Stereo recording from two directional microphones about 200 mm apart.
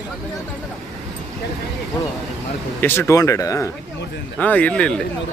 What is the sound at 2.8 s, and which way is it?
Speech, 10° left (ahead or behind).